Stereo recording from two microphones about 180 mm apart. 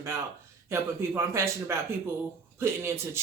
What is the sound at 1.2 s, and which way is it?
A man's voice, 15° right (ahead or behind).